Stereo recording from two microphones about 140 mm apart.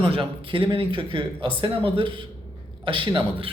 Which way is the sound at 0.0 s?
40° right (ahead or behind).